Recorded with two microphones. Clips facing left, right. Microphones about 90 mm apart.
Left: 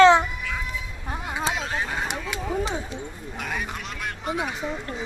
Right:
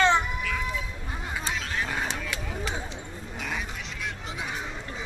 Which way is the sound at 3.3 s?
55° left (ahead or behind).